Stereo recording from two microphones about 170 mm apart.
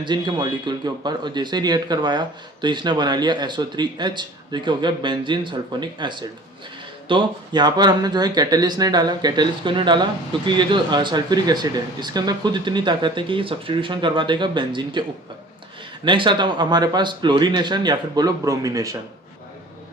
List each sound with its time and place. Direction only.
0.0 s speech: 25° right (ahead or behind)
16.0 s speech: 30° right (ahead or behind)